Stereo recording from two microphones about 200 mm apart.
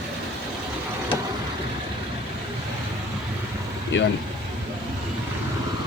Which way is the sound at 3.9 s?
65° left (ahead or behind).